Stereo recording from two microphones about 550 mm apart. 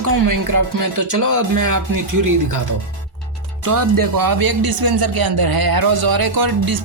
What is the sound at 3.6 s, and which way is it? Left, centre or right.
A man's voice, right.